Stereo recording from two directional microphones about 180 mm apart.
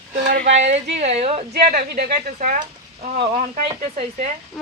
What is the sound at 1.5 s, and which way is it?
A woman's voice, 60° right (ahead or behind).